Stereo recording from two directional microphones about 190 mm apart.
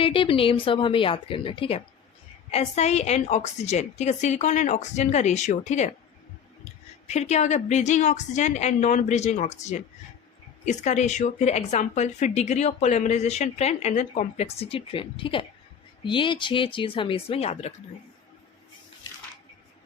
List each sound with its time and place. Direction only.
0.0 s a woman's voice: 30° left (ahead or behind)
7.1 s a woman's voice: 35° left (ahead or behind)